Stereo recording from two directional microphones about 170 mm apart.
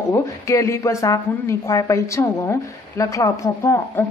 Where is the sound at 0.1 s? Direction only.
15° left (ahead or behind).